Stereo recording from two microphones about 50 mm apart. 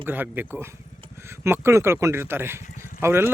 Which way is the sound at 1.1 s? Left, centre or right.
Right.